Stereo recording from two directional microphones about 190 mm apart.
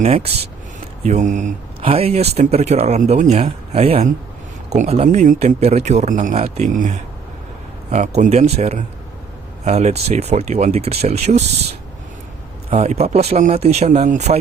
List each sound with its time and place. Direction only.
1.0 s speech: 40° right (ahead or behind)
1.8 s speech: 30° right (ahead or behind)
12.7 s speech: 35° right (ahead or behind)